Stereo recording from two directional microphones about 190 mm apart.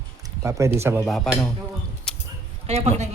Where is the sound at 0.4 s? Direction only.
15° right (ahead or behind).